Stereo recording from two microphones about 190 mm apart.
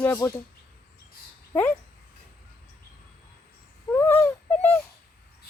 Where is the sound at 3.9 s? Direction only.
10° left (ahead or behind).